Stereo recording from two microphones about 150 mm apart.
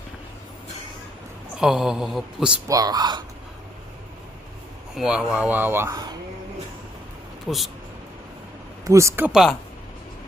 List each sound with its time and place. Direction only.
1.5 s speech: 5° right (ahead or behind)
2.6 s speech: 25° right (ahead or behind)
4.9 s speech: 5° right (ahead or behind)
7.4 s speech: centre (ahead or behind)
8.8 s speech: 20° right (ahead or behind)